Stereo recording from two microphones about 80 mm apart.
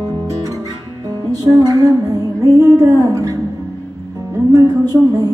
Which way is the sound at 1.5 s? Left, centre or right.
Right.